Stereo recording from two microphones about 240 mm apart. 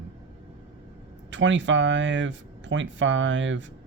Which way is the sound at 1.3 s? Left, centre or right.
Right.